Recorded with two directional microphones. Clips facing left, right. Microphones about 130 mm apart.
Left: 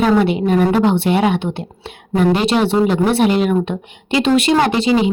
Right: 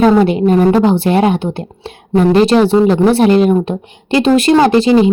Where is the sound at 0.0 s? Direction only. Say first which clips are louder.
Right 5 dB; 40° right (ahead or behind).